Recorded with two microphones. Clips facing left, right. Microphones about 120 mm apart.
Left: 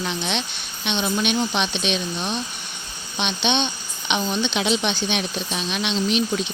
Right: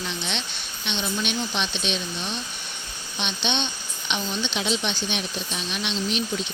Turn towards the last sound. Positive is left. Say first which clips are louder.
# left 5 dB
turn(degrees=75)  # may be behind; listen again after turning